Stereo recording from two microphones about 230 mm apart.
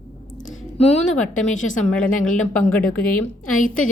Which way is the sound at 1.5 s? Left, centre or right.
Left.